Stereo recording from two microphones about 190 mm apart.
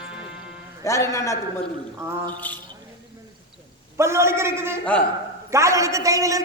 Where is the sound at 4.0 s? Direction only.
15° right (ahead or behind).